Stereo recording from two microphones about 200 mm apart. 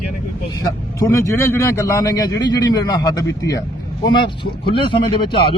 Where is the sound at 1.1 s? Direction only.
15° left (ahead or behind).